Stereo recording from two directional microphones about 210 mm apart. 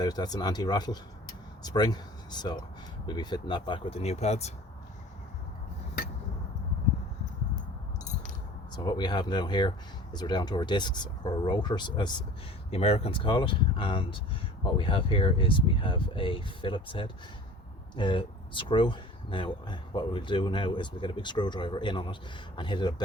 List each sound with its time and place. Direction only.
0.0 s speech: 20° left (ahead or behind)
8.7 s speech: 20° left (ahead or behind)